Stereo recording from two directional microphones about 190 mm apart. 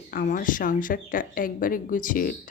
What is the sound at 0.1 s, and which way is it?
Speech, 45° left (ahead or behind).